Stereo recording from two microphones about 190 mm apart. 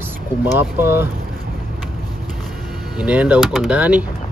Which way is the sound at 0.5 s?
10° right (ahead or behind).